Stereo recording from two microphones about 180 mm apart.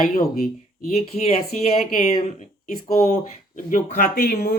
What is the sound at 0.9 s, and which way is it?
Speech, 35° left (ahead or behind).